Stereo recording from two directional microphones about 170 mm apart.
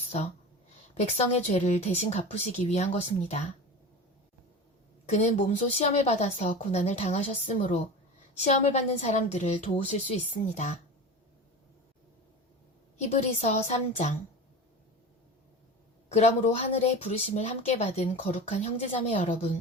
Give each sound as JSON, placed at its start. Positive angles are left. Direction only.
{"t": 0.9, "sound": "a woman's voice", "side_deg": 40}
{"t": 5.0, "sound": "a woman's voice", "side_deg": 40}
{"t": 13.0, "sound": "a woman's voice", "side_deg": 40}
{"t": 16.0, "sound": "a woman's voice", "side_deg": 40}